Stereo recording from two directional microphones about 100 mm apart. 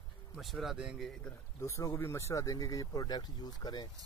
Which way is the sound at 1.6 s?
30° left (ahead or behind).